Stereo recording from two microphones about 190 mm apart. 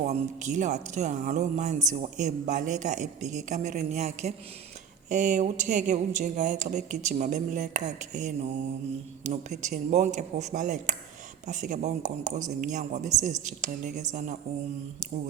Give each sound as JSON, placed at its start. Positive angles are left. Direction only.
{"t": 0.0, "sound": "a woman's voice", "side_deg": -40}